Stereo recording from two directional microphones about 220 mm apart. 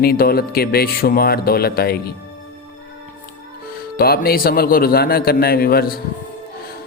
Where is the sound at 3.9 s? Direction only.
45° left (ahead or behind).